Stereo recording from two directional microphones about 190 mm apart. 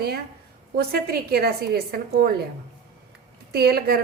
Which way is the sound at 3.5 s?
55° right (ahead or behind).